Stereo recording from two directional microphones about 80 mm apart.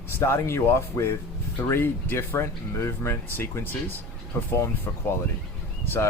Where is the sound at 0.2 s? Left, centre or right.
Left.